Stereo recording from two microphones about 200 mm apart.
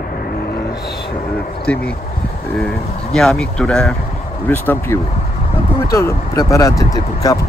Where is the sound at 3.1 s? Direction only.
5° left (ahead or behind).